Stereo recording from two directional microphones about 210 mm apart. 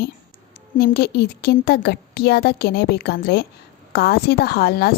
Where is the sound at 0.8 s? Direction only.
50° left (ahead or behind).